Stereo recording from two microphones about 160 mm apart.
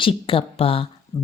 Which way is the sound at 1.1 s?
20° left (ahead or behind).